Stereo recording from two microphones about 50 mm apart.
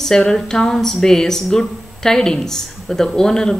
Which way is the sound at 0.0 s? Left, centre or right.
Centre.